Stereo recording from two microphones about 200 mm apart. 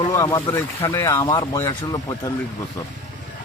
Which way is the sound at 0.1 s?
15° left (ahead or behind).